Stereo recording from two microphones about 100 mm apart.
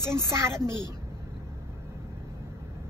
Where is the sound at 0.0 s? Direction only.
25° right (ahead or behind).